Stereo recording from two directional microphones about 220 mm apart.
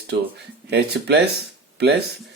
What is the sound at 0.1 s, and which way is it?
Speech, 50° right (ahead or behind).